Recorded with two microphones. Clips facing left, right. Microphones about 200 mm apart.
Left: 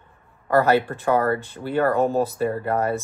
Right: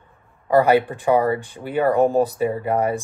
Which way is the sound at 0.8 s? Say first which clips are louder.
Right 2 dB; 15° right (ahead or behind).